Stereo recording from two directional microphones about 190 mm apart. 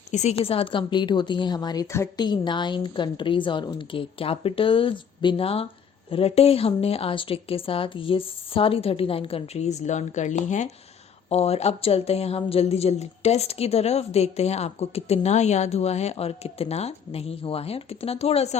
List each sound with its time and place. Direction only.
0.1 s a woman's voice: 35° left (ahead or behind)